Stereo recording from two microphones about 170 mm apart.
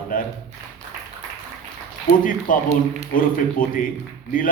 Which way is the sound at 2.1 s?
55° left (ahead or behind).